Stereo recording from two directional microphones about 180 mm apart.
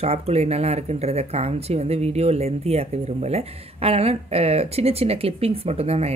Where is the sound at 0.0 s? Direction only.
35° right (ahead or behind).